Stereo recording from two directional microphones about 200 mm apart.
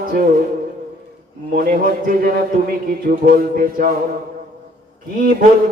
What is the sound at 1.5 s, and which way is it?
A man's voice, 45° right (ahead or behind).